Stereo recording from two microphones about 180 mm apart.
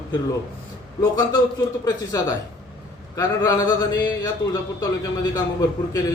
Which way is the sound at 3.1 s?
20° left (ahead or behind).